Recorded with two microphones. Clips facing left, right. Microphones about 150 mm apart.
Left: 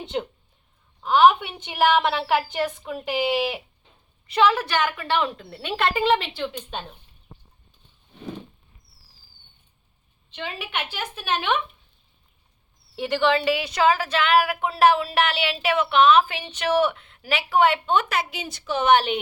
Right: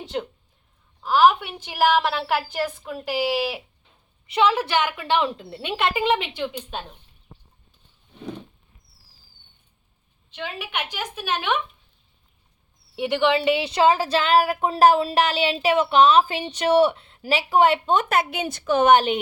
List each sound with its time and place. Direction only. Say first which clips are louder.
0.0 s a woman's voice: left 1 dB; centre (ahead or behind)
4.4 s a woman's voice: even; 25° right (ahead or behind)
6.7 s a woman's voice: even; 5° right (ahead or behind)
10.3 s a woman's voice: even; 5° right (ahead or behind)
13.0 s a woman's voice: right 1 dB; 20° right (ahead or behind); by 19.2 s 45° right (ahead or behind)